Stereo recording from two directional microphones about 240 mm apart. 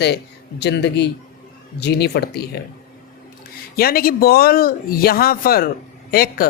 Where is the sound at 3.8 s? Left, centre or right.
Left.